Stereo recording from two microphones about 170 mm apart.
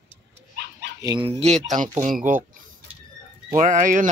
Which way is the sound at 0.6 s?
80° right.